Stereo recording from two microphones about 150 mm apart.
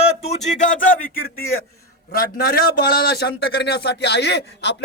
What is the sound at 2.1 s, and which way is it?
A man's voice, 90° left.